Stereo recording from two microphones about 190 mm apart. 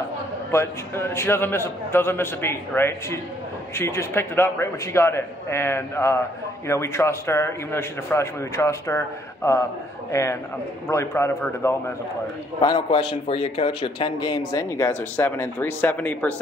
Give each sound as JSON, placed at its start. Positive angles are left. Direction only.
{"t": 0.5, "sound": "a man's voice", "side_deg": 15}
{"t": 10.9, "sound": "a man's voice", "side_deg": 15}
{"t": 12.5, "sound": "a man's voice", "side_deg": 25}